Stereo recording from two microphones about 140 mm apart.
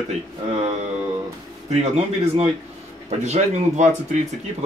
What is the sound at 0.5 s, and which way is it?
Speech, 50° right (ahead or behind).